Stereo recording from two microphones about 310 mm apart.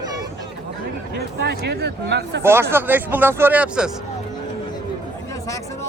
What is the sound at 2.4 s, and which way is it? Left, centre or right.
Speech, centre.